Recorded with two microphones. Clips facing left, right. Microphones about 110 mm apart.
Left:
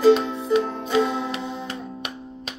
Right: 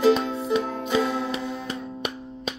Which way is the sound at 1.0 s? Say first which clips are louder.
Even; 20° left (ahead or behind).